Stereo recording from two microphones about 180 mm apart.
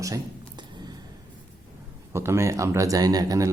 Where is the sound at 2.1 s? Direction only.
15° right (ahead or behind).